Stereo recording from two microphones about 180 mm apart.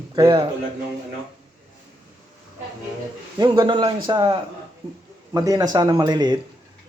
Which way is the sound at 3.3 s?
25° right (ahead or behind).